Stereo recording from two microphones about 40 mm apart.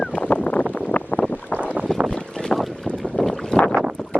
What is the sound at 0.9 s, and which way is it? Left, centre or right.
Boat, left.